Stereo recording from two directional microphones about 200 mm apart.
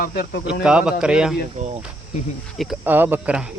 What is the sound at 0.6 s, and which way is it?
Speech, 5° right (ahead or behind).